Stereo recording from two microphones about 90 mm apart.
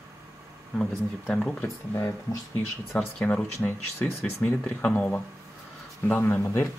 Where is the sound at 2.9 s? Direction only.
20° left (ahead or behind).